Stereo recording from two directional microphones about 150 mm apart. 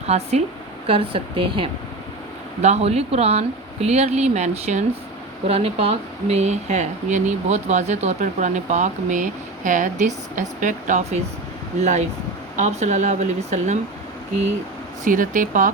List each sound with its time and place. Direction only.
0.0 s speech: 45° right (ahead or behind)
15.0 s speech: 60° right (ahead or behind)